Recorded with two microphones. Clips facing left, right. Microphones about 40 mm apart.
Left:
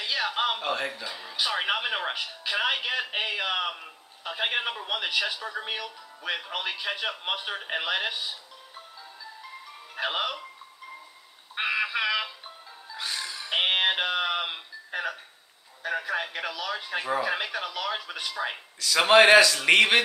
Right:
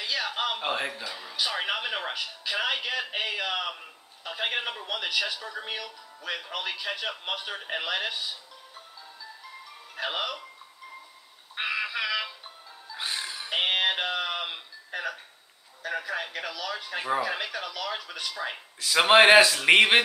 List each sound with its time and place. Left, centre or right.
0.0 s speech: centre
0.6 s a man's voice: centre
1.0 s a man's voice: centre
9.9 s a man's voice: centre
11.5 s music: centre
12.9 s music: centre
13.5 s music: centre
15.8 s a man's voice: centre
18.8 s a man's voice: centre